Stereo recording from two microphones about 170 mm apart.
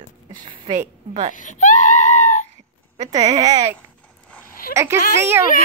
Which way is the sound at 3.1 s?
20° right (ahead or behind).